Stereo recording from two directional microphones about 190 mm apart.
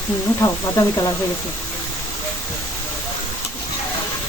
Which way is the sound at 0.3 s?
15° left (ahead or behind).